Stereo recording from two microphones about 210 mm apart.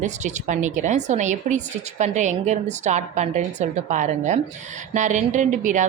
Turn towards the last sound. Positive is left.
turn(degrees=-35)  # may be behind; listen again after turning